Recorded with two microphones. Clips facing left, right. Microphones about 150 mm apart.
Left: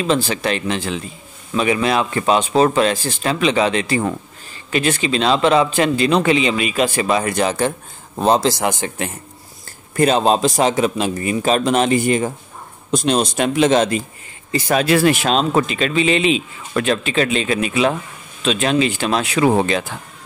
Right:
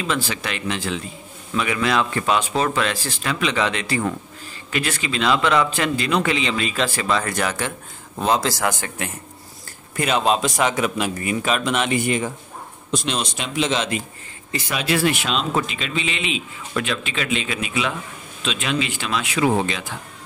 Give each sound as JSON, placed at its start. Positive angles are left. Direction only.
{"t": 0.0, "sound": "a man's voice", "side_deg": 30}
{"t": 9.9, "sound": "speech", "side_deg": 35}